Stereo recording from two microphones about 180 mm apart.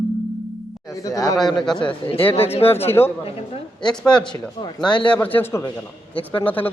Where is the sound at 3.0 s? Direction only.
10° left (ahead or behind).